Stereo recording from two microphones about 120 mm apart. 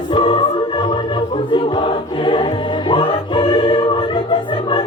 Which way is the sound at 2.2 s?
45° left (ahead or behind).